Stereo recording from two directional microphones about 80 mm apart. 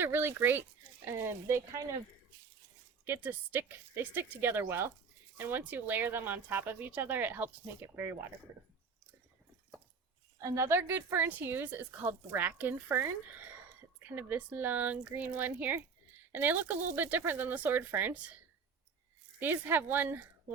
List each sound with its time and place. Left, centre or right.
0.0 s a woman's voice: right
3.0 s a woman's voice: right
10.4 s a woman's voice: right
19.4 s a woman's voice: right